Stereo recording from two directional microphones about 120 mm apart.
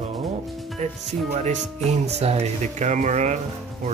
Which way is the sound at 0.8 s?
70° right (ahead or behind).